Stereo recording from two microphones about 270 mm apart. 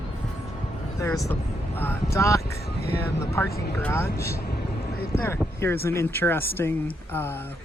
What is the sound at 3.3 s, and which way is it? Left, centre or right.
Speech, centre.